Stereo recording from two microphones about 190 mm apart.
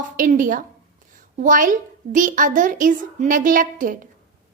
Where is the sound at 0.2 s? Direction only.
45° right (ahead or behind).